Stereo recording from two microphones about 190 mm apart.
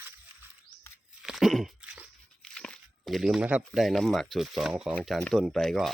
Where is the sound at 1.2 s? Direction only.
Centre (ahead or behind).